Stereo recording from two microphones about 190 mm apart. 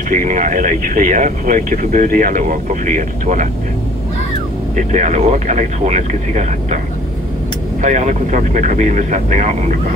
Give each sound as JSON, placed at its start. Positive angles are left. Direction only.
{"t": 0.1, "sound": "speech", "side_deg": -45}
{"t": 4.7, "sound": "speech", "side_deg": -40}
{"t": 7.8, "sound": "speech", "side_deg": -40}